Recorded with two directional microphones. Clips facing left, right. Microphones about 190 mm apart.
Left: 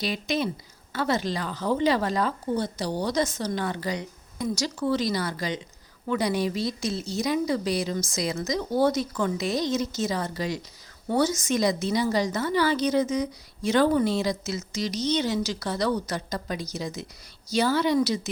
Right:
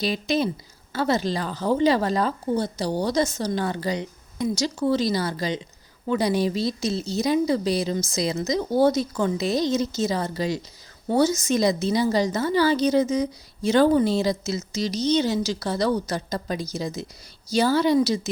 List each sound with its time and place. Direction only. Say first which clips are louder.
0.0 s a woman's voice: right 4 dB; 30° right (ahead or behind)